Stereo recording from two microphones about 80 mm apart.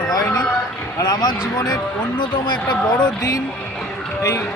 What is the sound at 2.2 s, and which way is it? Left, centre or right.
A man's voice, left.